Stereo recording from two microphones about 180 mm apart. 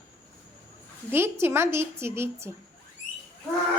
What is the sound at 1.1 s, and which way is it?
A woman's voice, 15° right (ahead or behind).